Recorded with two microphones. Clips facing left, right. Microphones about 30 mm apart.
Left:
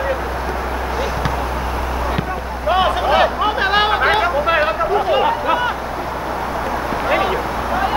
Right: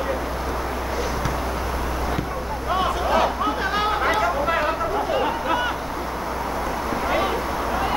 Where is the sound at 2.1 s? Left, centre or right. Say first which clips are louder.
Left 4 dB; left.